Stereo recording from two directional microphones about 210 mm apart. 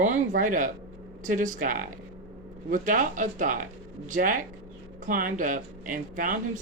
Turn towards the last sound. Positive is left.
turn(degrees=-40)  # may be behind; listen again after turning